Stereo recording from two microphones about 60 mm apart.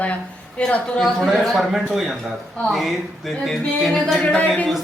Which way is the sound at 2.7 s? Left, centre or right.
Centre.